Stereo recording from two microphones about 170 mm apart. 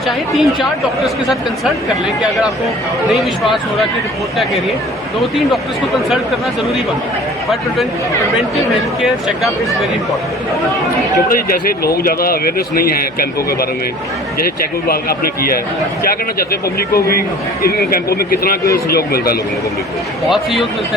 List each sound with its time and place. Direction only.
0.3 s speech: centre (ahead or behind)
3.2 s speech: centre (ahead or behind)
9.0 s speech: centre (ahead or behind)
11.3 s a man's voice: 60° left (ahead or behind)
20.3 s speech: centre (ahead or behind)